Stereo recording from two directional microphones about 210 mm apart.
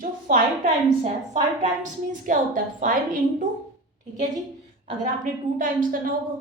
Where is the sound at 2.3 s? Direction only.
40° right (ahead or behind).